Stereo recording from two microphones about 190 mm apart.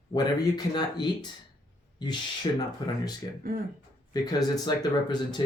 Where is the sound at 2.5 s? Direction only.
25° left (ahead or behind).